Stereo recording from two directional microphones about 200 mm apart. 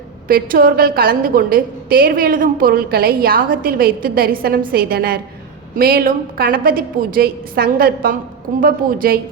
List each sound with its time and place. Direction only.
0.3 s a woman's voice: 45° right (ahead or behind)